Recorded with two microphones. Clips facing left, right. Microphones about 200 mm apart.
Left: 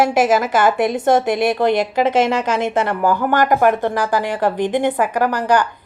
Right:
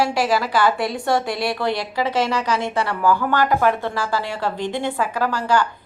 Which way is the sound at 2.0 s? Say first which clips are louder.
Left 4 dB; 50° left (ahead or behind).